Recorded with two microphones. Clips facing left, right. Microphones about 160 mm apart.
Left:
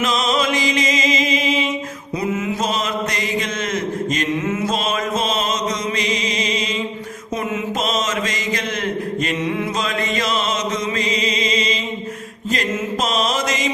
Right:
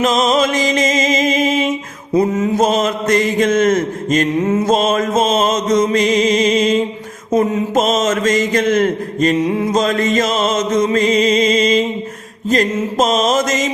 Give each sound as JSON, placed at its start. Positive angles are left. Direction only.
{"t": 0.0, "sound": "music", "side_deg": -45}
{"t": 2.1, "sound": "mantra", "side_deg": -40}